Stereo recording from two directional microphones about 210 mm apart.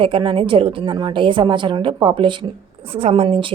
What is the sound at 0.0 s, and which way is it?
A woman's voice, 25° right (ahead or behind).